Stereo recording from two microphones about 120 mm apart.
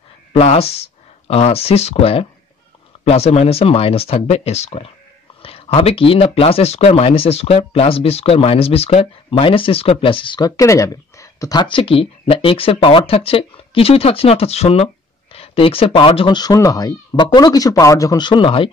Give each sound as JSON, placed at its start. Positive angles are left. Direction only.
{"t": 0.3, "sound": "speech", "side_deg": 55}
{"t": 10.5, "sound": "speech", "side_deg": 25}
{"t": 11.6, "sound": "speech", "side_deg": 50}
{"t": 16.3, "sound": "speech", "side_deg": 30}